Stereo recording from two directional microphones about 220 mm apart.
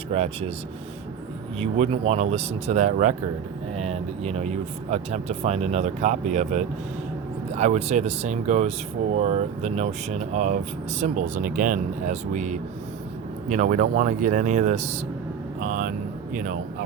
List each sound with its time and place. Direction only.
0.1 s speech: 30° right (ahead or behind)
1.5 s speech: 30° right (ahead or behind)